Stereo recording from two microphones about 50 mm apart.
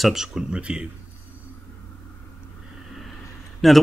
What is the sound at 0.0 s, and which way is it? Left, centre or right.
Speech, centre.